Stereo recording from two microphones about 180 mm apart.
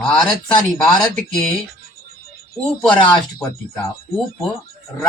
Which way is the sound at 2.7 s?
5° left (ahead or behind).